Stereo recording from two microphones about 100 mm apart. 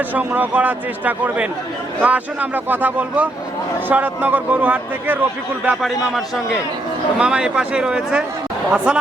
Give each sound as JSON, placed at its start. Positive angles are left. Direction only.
{"t": 0.1, "sound": "a man's voice", "side_deg": -15}
{"t": 5.8, "sound": "a man's voice", "side_deg": 0}